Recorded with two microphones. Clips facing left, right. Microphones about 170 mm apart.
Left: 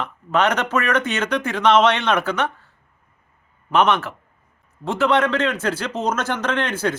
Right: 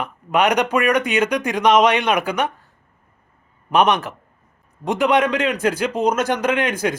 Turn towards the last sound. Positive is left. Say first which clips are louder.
# right 2 dB
turn(degrees=-15)  # may be behind; listen again after turning